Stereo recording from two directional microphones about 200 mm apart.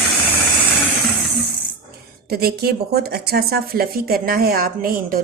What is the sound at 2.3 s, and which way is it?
Speech, 50° right (ahead or behind).